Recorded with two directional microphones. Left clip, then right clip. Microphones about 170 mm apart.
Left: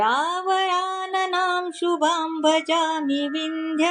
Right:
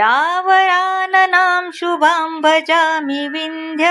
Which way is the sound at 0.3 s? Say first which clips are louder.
Right 9 dB; 5° right (ahead or behind).